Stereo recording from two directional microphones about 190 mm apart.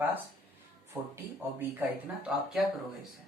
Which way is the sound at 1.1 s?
10° right (ahead or behind).